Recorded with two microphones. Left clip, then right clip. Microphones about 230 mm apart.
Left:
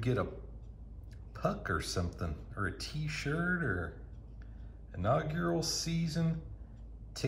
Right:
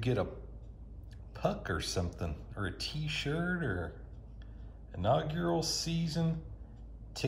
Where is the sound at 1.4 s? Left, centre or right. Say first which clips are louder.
Even; centre.